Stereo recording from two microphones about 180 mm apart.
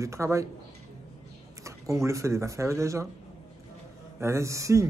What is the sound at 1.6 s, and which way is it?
Speech, 15° right (ahead or behind).